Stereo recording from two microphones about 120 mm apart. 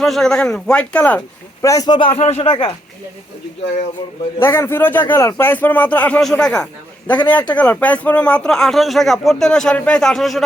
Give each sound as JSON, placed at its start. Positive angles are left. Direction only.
{"t": 0.0, "sound": "speech", "side_deg": 5}
{"t": 1.6, "sound": "speech", "side_deg": 30}
{"t": 2.0, "sound": "speech", "side_deg": 55}
{"t": 2.5, "sound": "speech", "side_deg": 45}
{"t": 4.4, "sound": "speech", "side_deg": 20}